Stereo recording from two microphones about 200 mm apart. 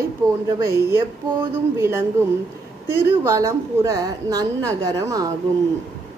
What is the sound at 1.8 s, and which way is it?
Speech, 10° right (ahead or behind).